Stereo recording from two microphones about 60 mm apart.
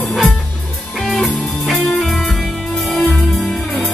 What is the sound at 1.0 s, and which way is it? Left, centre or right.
Music, centre.